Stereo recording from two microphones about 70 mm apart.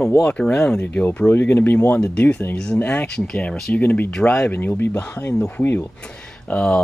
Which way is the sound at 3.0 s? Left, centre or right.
Centre.